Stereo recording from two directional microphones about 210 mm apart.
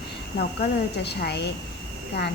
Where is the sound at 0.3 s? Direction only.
50° left (ahead or behind).